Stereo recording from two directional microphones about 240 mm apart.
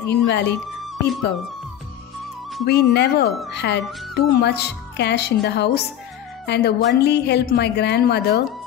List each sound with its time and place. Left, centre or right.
0.1 s speech: left
2.6 s speech: left